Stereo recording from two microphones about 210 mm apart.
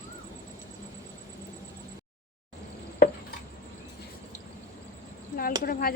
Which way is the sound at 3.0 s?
40° left (ahead or behind).